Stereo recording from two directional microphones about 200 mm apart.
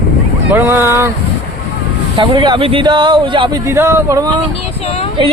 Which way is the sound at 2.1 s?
25° right (ahead or behind).